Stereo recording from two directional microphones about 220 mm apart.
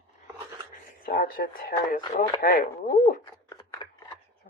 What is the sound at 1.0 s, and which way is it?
Speech, 40° left (ahead or behind).